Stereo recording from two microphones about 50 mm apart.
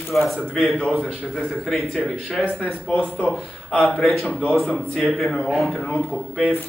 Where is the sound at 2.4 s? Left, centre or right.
Left.